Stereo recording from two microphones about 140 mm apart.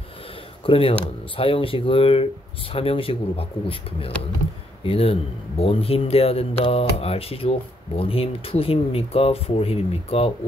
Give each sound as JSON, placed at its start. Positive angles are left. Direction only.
{"t": 0.7, "sound": "speech", "side_deg": 40}